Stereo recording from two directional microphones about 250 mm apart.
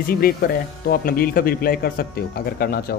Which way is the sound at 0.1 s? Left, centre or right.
Left.